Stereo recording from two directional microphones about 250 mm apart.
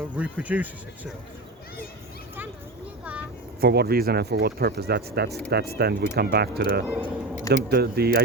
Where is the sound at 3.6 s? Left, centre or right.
Right.